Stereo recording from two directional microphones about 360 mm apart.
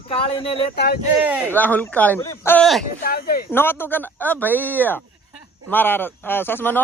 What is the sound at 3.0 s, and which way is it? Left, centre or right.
Speech, left.